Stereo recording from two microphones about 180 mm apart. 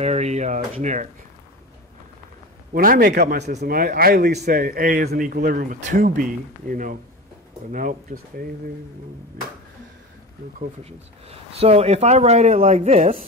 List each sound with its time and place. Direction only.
0.0 s speech: 35° right (ahead or behind)
2.7 s speech: 50° right (ahead or behind)
10.8 s speech: 35° right (ahead or behind)